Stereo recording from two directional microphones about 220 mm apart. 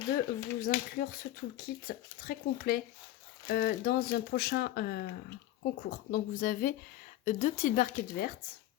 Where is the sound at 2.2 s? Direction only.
40° left (ahead or behind).